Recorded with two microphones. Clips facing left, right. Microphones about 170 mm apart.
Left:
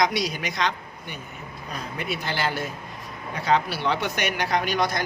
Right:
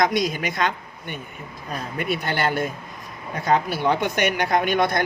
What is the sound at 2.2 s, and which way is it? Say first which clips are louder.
Speech: right 3 dB; 55° right (ahead or behind).